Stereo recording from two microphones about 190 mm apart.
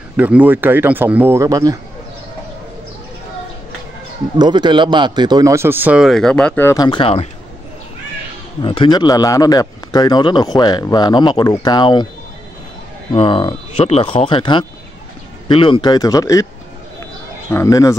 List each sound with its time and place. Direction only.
0.2 s speech: 10° right (ahead or behind)
4.4 s speech: 25° right (ahead or behind); by 7.2 s 30° left (ahead or behind)
8.6 s a man's voice: 25° left (ahead or behind)
13.1 s a man's voice: 25° left (ahead or behind)
17.5 s speech: 15° left (ahead or behind)